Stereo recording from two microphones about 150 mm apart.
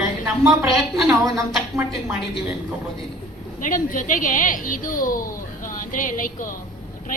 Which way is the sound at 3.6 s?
60° left (ahead or behind).